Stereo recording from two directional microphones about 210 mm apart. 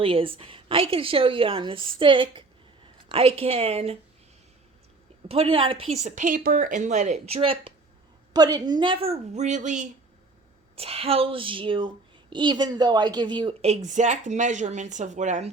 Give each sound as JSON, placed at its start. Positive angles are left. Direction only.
{"t": 0.0, "sound": "a woman's voice", "side_deg": -25}
{"t": 5.3, "sound": "a woman's voice", "side_deg": -25}